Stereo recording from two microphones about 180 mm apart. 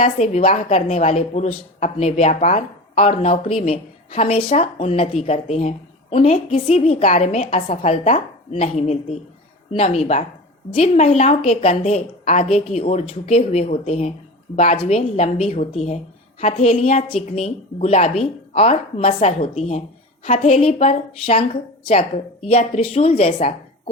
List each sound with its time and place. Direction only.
0.0 s a woman's voice: 35° left (ahead or behind)